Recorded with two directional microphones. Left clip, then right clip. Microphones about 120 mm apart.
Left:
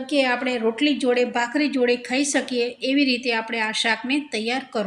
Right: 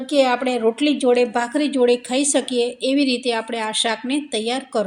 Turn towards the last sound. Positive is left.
turn(degrees=-25)  # may be behind; listen again after turning